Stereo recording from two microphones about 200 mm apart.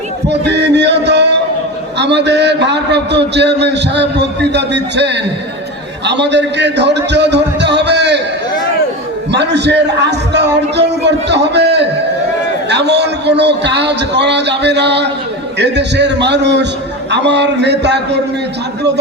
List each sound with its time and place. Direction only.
0.3 s a sound: 60° right (ahead or behind)
2.0 s a man's voice: 60° right (ahead or behind)
9.3 s a man's voice: 60° right (ahead or behind)